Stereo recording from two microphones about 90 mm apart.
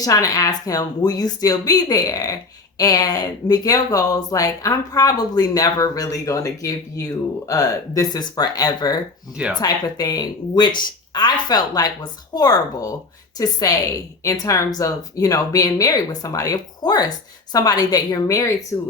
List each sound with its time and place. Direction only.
0.0 s a woman's voice: 40° left (ahead or behind)